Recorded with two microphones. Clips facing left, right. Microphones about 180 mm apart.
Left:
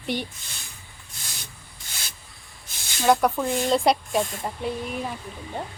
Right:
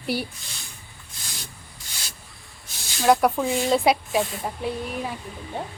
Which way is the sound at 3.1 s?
Centre (ahead or behind).